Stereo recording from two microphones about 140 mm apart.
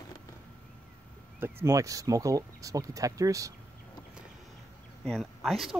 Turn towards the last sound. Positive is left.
turn(degrees=0)  # may be behind; listen again after turning